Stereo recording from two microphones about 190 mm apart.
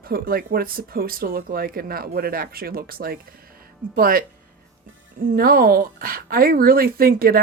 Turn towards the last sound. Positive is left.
turn(degrees=-50)  # may be behind; listen again after turning